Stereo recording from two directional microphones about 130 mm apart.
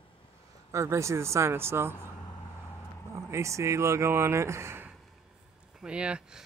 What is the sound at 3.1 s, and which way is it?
Speech, 25° right (ahead or behind).